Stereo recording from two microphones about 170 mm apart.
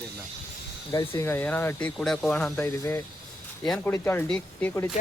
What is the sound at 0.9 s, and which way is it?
A man's voice, 20° left (ahead or behind).